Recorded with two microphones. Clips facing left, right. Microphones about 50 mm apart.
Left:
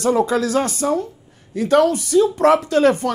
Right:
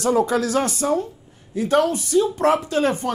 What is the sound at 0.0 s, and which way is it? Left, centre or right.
A woman's voice, left.